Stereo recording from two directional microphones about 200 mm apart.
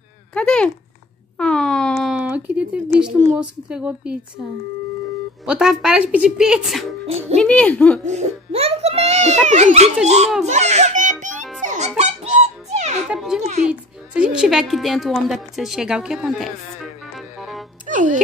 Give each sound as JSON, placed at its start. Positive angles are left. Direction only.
{"t": 0.3, "sound": "a woman's voice", "side_deg": 5}
{"t": 5.4, "sound": "a woman's voice", "side_deg": -5}
{"t": 8.0, "sound": "a child's voice", "side_deg": -35}
{"t": 11.6, "sound": "music", "side_deg": -40}
{"t": 12.0, "sound": "a sound", "side_deg": -35}
{"t": 13.1, "sound": "a woman's voice", "side_deg": -5}
{"t": 17.1, "sound": "music", "side_deg": 0}
{"t": 17.8, "sound": "music", "side_deg": -40}